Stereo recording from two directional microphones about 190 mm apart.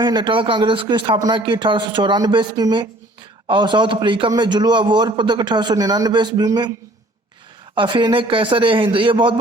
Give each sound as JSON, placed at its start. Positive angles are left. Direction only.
{"t": 0.0, "sound": "a man's voice", "side_deg": -25}
{"t": 7.8, "sound": "a man's voice", "side_deg": -25}